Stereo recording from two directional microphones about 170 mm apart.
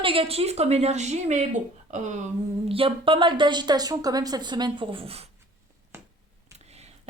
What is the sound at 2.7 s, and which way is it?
A woman's voice, 30° right (ahead or behind).